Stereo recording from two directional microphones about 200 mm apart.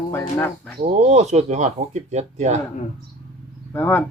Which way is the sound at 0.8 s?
35° right (ahead or behind).